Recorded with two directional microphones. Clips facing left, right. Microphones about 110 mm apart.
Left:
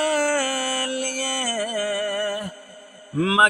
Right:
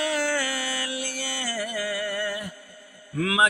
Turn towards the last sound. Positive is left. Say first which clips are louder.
# left 5 dB
turn(degrees=30)  # may be behind; listen again after turning